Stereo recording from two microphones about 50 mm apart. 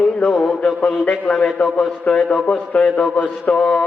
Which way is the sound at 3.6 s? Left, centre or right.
Centre.